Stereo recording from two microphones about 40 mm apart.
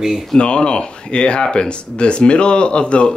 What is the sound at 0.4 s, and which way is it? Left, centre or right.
Speech, left.